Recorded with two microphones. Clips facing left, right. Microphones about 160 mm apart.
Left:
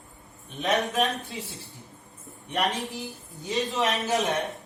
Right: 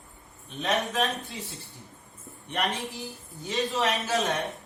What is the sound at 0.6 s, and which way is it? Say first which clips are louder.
Speech: left 2 dB; 15° left (ahead or behind).